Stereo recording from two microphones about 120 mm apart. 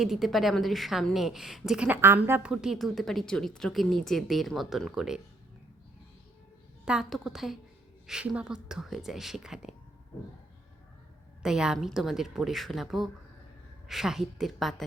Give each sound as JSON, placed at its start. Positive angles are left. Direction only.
{"t": 0.0, "sound": "speech", "side_deg": 0}
{"t": 2.0, "sound": "a woman's voice", "side_deg": -20}
{"t": 2.4, "sound": "speech", "side_deg": -5}
{"t": 6.8, "sound": "speech", "side_deg": -5}
{"t": 11.4, "sound": "speech", "side_deg": -5}